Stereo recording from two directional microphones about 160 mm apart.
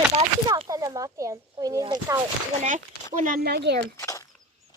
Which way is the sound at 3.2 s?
70° right (ahead or behind).